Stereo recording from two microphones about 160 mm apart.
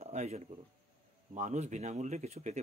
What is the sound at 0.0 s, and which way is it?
Speech, 40° right (ahead or behind).